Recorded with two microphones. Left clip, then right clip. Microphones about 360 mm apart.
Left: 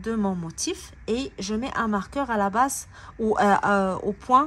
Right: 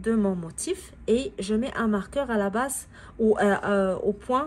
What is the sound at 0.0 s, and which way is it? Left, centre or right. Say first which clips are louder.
A woman's voice: right 2 dB; centre.